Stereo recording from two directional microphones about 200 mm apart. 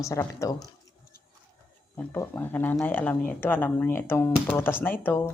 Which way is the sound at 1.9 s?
10° left (ahead or behind).